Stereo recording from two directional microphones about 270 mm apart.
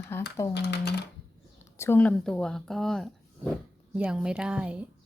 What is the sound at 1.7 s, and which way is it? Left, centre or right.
Speech, centre.